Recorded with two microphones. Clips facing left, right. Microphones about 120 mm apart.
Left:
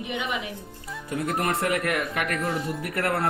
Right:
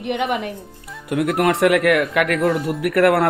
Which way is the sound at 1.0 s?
75° right (ahead or behind).